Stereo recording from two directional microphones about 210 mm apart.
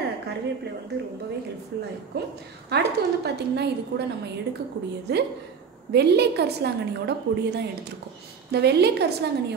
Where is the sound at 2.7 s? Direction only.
50° right (ahead or behind).